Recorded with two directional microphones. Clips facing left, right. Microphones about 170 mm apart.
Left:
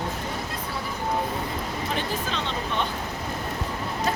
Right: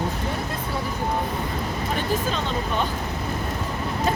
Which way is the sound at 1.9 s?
45° right (ahead or behind).